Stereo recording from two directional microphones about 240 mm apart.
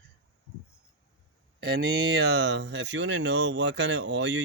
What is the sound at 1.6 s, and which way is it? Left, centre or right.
Speech, right.